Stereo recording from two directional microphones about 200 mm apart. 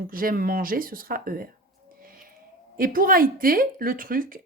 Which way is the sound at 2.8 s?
45° right (ahead or behind).